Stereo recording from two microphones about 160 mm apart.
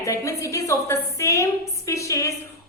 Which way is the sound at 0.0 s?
20° left (ahead or behind).